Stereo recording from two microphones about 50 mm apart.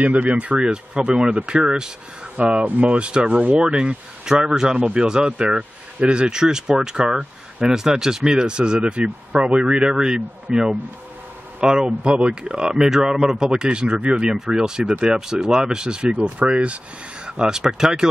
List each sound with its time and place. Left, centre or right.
0.0 s speech: right
0.6 s speech: centre
3.7 s speech: centre